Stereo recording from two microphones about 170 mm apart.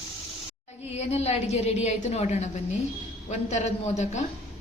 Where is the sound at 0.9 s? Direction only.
40° left (ahead or behind).